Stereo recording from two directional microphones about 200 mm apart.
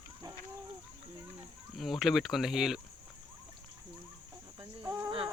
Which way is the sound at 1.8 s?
Centre (ahead or behind).